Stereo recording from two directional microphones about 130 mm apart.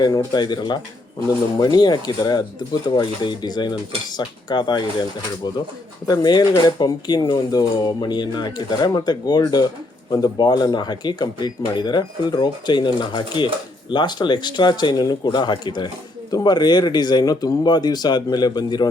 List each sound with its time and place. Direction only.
0.0 s speech: 30° left (ahead or behind)
6.1 s speech: 30° left (ahead or behind)